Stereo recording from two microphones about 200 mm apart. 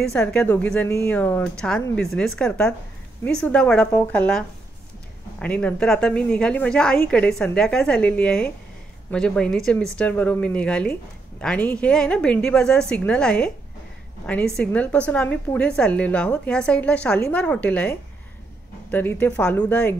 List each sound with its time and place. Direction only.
0.1 s speech: 5° left (ahead or behind)